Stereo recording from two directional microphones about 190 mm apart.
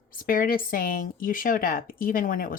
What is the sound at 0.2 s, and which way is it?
Speech, 45° left (ahead or behind).